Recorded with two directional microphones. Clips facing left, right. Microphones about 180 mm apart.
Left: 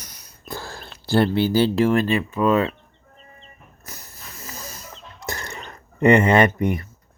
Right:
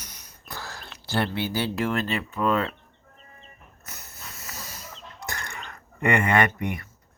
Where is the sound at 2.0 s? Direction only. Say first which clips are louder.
Left 6 dB; 10° left (ahead or behind).